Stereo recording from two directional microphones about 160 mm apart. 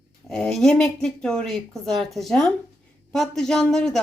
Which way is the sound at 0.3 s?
5° left (ahead or behind).